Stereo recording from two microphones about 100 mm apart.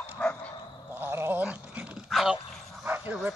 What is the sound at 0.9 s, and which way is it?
Dog, 20° right (ahead or behind).